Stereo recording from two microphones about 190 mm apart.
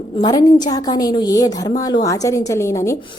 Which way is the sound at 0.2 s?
20° left (ahead or behind).